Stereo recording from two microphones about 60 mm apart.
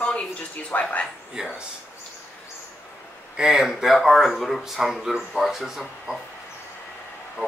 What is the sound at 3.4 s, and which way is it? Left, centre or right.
Speech, centre.